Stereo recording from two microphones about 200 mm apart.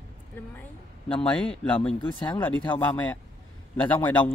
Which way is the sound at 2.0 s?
25° left (ahead or behind).